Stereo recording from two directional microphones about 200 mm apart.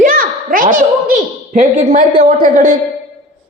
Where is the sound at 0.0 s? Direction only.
45° right (ahead or behind).